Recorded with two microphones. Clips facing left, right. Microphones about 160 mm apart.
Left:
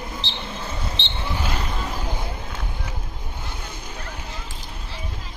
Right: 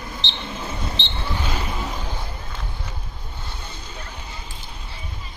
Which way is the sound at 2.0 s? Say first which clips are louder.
Left 3 dB; 10° left (ahead or behind).